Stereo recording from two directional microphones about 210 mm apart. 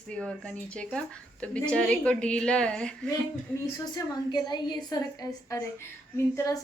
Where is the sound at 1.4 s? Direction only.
5° left (ahead or behind).